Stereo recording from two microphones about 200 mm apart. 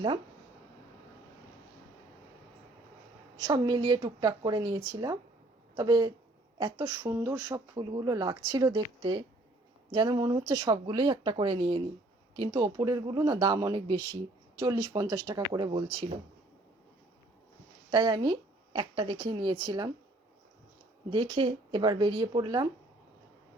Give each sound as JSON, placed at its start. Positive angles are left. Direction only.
{"t": 3.3, "sound": "speech", "side_deg": -20}
{"t": 7.1, "sound": "speech", "side_deg": -10}
{"t": 17.9, "sound": "speech", "side_deg": -20}
{"t": 21.1, "sound": "speech", "side_deg": -25}